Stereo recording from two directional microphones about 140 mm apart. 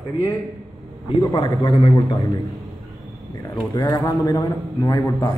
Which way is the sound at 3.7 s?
25° left (ahead or behind).